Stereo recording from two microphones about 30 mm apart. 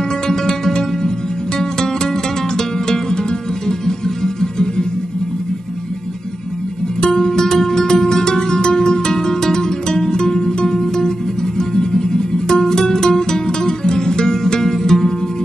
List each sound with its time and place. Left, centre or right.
0.3 s music: centre
3.8 s music: centre
7.0 s music: centre
14.6 s music: centre